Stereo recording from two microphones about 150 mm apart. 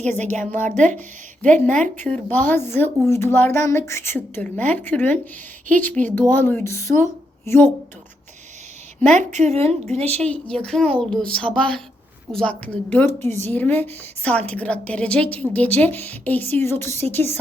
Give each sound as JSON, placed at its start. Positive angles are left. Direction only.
{"t": 0.0, "sound": "a woman's voice", "side_deg": 10}
{"t": 9.1, "sound": "a woman's voice", "side_deg": -50}
{"t": 10.2, "sound": "a woman's voice", "side_deg": 10}